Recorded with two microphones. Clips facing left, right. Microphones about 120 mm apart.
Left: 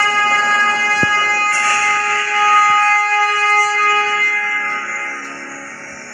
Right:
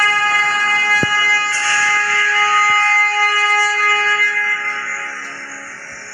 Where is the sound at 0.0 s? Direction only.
30° left (ahead or behind).